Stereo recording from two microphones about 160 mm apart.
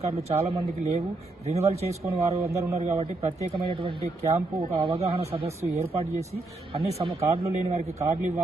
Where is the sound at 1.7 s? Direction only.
40° right (ahead or behind).